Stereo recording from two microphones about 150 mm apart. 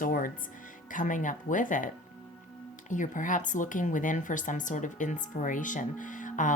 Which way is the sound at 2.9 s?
60° left (ahead or behind).